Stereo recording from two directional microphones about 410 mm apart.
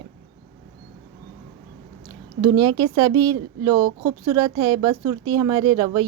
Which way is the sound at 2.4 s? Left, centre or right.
Centre.